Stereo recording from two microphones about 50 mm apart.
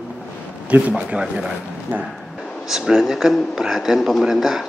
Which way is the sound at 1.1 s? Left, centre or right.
Centre.